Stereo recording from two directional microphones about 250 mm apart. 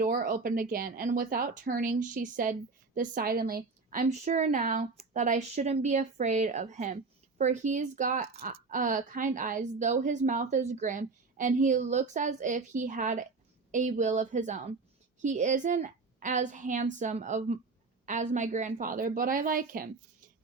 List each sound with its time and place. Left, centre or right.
0.0 s a woman's voice: right